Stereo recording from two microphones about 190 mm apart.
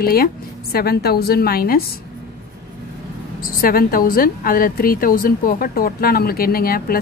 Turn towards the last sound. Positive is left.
turn(degrees=50)  # may be behind; listen again after turning